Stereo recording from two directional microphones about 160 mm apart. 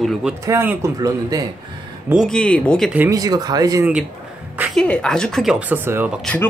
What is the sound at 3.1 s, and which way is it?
Speech, 25° right (ahead or behind).